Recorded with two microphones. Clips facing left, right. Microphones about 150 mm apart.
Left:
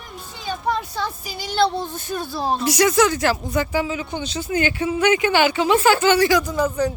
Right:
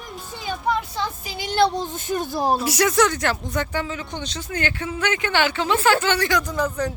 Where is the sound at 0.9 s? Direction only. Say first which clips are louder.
Left 1 dB; 20° right (ahead or behind).